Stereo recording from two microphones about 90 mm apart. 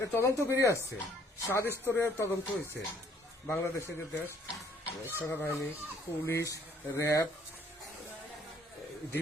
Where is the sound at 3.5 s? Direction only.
25° left (ahead or behind).